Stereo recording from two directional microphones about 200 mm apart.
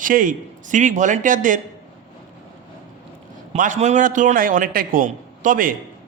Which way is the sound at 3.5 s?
40° right (ahead or behind).